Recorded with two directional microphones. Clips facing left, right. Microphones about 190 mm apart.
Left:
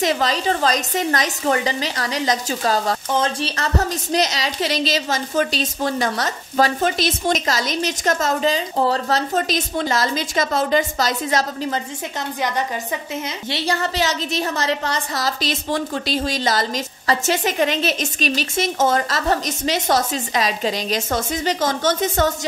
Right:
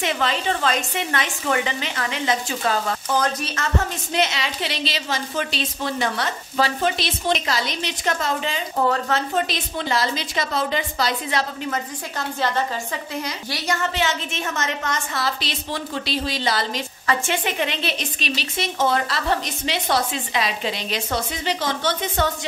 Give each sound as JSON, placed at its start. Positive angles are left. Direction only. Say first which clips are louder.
{"t": 0.0, "sound": "speech", "louder": "left 4 dB", "side_deg": 40}
{"t": 3.1, "sound": "a woman's voice", "louder": "left 2 dB", "side_deg": 25}
{"t": 12.4, "sound": "a woman's voice", "louder": "even", "side_deg": 15}